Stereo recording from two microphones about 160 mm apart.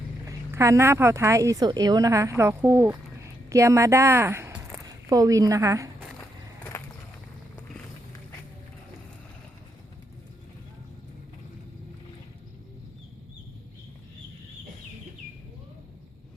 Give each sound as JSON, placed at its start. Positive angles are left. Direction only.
{"t": 0.3, "sound": "a woman's voice", "side_deg": -20}